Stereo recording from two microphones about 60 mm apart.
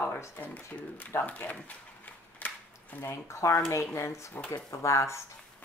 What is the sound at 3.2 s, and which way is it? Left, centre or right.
Speech, left.